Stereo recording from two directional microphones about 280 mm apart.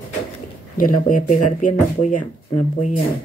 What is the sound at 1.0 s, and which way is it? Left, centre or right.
Speech, left.